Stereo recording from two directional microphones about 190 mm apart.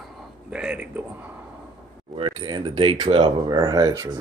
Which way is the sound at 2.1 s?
25° right (ahead or behind).